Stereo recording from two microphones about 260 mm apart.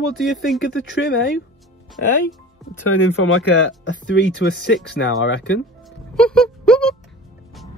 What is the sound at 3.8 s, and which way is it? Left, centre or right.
Speech, left.